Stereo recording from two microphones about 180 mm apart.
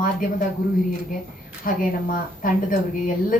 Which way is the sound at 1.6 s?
50° left (ahead or behind).